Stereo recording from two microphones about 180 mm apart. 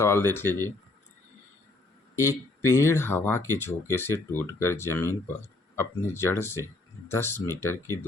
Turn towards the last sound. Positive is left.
turn(degrees=15)  # may be behind; listen again after turning